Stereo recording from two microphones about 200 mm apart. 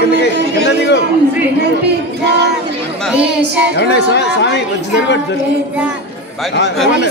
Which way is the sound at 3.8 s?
60° left (ahead or behind).